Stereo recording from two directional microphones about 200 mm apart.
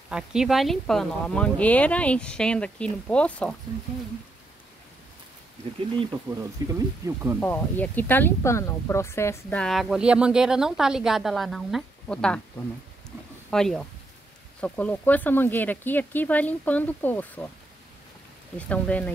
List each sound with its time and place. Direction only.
0.1 s speech: 5° right (ahead or behind)
6.6 s speech: 20° right (ahead or behind)
7.3 s speech: 10° left (ahead or behind)
13.5 s speech: 5° left (ahead or behind)
18.6 s speech: 5° left (ahead or behind)